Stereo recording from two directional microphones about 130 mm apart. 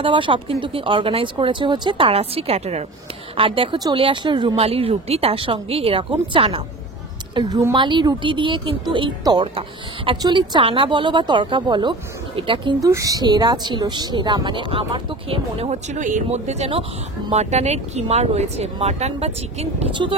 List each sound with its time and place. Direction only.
0.0 s speech: 40° right (ahead or behind)
3.3 s a woman's voice: 45° right (ahead or behind)
3.7 s a woman's voice: 30° right (ahead or behind)
7.3 s speech: 30° right (ahead or behind)
12.8 s speech: 25° right (ahead or behind); by 19.9 s 50° right (ahead or behind)